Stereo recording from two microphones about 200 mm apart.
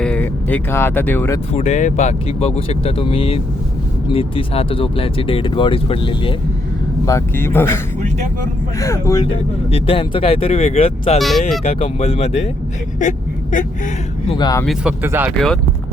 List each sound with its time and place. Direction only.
0.0 s speech: 5° left (ahead or behind)
1.5 s speech: 35° left (ahead or behind)
7.0 s speech: 15° left (ahead or behind)
8.8 s speech: 15° left (ahead or behind)
9.7 s speech: 30° left (ahead or behind)
11.2 s speech: centre (ahead or behind)
11.6 s speech: 35° left (ahead or behind)
13.0 s a sound: 40° left (ahead or behind)
14.3 s speech: 20° left (ahead or behind)
14.6 s speech: centre (ahead or behind)
15.0 s speech: 10° right (ahead or behind)